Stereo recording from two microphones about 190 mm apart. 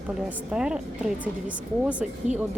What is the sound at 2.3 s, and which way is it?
Speech, 40° right (ahead or behind).